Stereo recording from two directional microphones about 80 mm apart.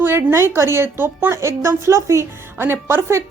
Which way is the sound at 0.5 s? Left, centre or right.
Right.